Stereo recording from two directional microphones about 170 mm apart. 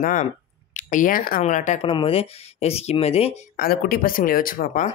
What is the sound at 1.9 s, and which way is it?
Speech, 30° left (ahead or behind).